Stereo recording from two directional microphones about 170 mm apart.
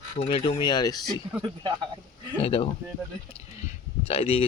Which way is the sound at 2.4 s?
35° left (ahead or behind).